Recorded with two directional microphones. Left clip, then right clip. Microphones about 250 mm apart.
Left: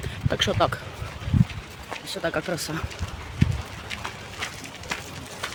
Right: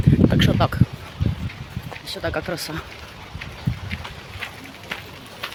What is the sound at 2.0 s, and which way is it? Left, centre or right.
Speech, centre.